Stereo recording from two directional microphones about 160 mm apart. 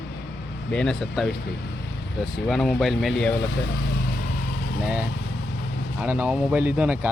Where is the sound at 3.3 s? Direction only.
90° left; by 4.4 s 70° left (ahead or behind).